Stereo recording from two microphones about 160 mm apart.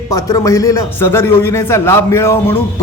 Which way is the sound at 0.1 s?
20° left (ahead or behind).